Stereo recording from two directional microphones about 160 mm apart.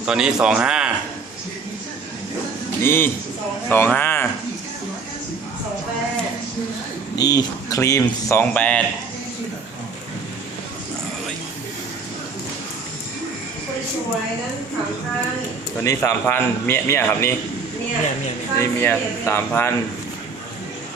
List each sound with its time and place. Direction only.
0.0 s a man's voice: 5° right (ahead or behind)
2.8 s speech: 15° left (ahead or behind)
7.2 s speech: 25° left (ahead or behind)
15.8 s speech: 20° left (ahead or behind)
18.6 s speech: 15° left (ahead or behind)